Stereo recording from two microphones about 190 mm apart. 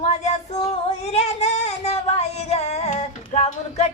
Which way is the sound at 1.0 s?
35° left (ahead or behind).